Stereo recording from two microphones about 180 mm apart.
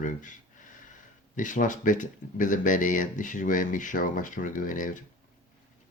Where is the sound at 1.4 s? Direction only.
45° left (ahead or behind).